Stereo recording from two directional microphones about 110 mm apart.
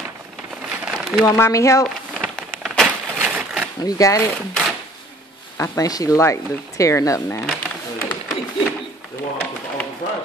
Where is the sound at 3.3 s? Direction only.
10° right (ahead or behind).